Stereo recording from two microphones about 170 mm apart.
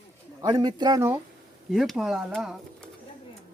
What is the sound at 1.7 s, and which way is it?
Speech, centre (ahead or behind).